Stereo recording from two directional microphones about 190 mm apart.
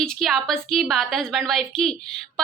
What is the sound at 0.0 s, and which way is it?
Speech, centre (ahead or behind).